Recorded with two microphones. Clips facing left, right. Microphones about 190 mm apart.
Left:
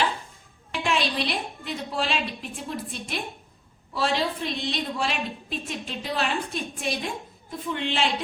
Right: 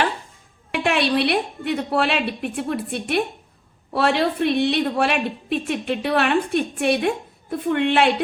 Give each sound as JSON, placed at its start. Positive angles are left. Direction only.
{"t": 0.7, "sound": "a woman's voice", "side_deg": -65}